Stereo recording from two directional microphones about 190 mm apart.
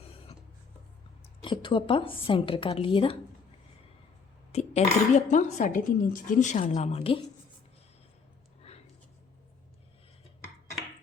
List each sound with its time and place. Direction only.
1.4 s a woman's voice: 25° left (ahead or behind)
4.5 s speech: 35° left (ahead or behind)
8.7 s a sound: 35° left (ahead or behind)